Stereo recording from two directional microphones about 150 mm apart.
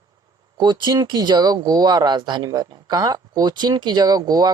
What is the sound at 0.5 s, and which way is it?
Speech, 30° right (ahead or behind).